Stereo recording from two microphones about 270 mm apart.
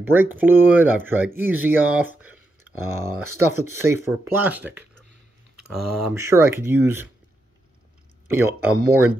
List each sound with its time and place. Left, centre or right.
0.0 s speech: centre
2.6 s a sound: right
3.2 s speech: right
3.7 s speech: centre
6.1 s speech: centre
8.3 s speech: centre
8.7 s speech: right